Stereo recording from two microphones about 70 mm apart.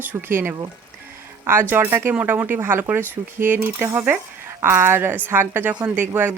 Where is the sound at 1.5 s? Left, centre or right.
Right.